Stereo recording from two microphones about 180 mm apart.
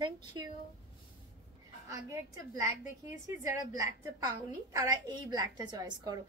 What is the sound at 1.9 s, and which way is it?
Speech, 15° right (ahead or behind).